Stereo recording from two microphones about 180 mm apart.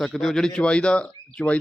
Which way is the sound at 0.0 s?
Centre (ahead or behind).